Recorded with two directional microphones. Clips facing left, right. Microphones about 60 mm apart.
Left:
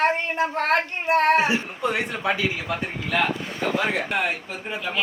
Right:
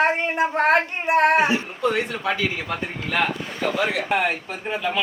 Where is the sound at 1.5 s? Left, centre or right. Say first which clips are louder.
Right 2 dB; left.